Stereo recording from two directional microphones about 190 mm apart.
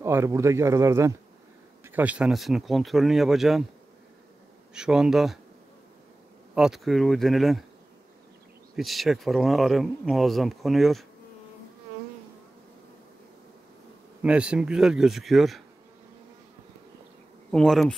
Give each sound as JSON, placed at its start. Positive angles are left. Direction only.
{"t": 0.0, "sound": "speech", "side_deg": -15}
{"t": 4.7, "sound": "speech", "side_deg": -5}
{"t": 6.5, "sound": "speech", "side_deg": -5}
{"t": 8.7, "sound": "speech", "side_deg": 0}
{"t": 14.2, "sound": "speech", "side_deg": -5}
{"t": 17.5, "sound": "speech", "side_deg": 0}